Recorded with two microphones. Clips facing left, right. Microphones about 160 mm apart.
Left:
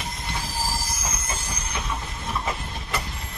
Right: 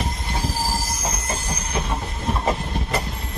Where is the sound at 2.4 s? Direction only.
40° right (ahead or behind).